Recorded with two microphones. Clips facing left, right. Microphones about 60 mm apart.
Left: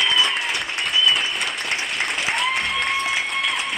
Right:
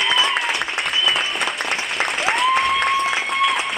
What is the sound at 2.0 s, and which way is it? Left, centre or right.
Applause, right.